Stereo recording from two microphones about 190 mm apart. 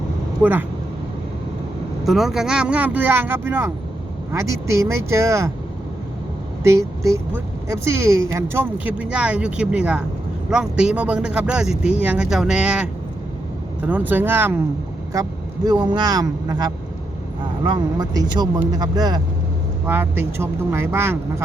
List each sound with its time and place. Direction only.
0.4 s speech: 10° right (ahead or behind)
2.0 s speech: centre (ahead or behind)
6.6 s speech: 15° right (ahead or behind)